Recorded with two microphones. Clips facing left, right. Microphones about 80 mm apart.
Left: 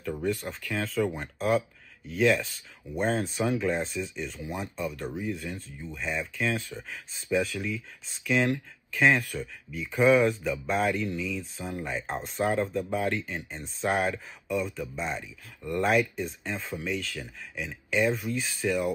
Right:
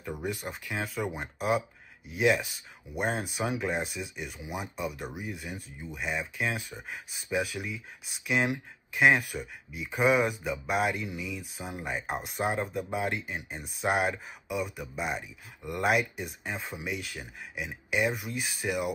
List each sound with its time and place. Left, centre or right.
0.0 s speech: centre